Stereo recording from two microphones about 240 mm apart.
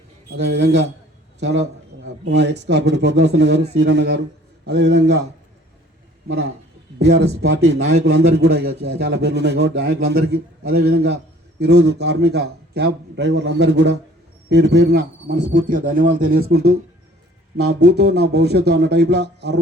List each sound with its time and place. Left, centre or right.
0.4 s a man's voice: right
6.2 s a man's voice: right
8.0 s a man's voice: right